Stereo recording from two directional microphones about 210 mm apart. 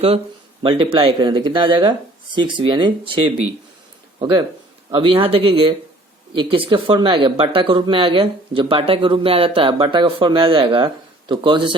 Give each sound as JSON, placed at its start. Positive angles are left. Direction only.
{"t": 0.6, "sound": "speech", "side_deg": -25}